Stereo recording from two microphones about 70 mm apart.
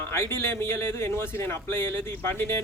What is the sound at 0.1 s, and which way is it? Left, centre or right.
Speech, left.